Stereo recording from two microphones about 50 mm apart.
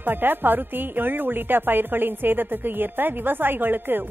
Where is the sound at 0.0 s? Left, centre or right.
Right.